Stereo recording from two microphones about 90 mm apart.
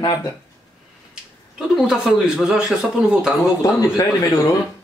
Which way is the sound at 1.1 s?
10° right (ahead or behind).